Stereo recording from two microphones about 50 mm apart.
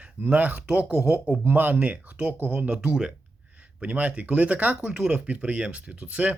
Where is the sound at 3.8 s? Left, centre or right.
Right.